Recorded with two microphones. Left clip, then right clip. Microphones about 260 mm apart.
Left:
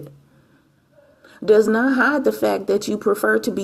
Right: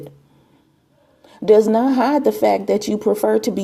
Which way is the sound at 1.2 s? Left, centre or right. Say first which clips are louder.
Right 2 dB; right.